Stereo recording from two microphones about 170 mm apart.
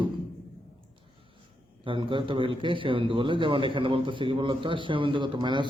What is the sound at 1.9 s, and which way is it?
A man's voice, 30° right (ahead or behind).